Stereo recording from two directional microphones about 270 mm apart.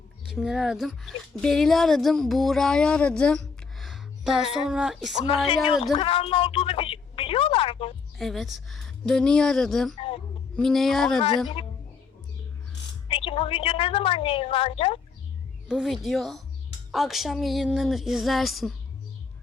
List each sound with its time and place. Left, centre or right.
0.3 s speech: centre
5.8 s speech: centre
8.2 s speech: centre
13.1 s a woman's voice: centre
15.7 s speech: centre